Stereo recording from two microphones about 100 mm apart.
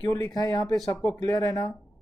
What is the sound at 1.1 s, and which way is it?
Speech, 35° left (ahead or behind).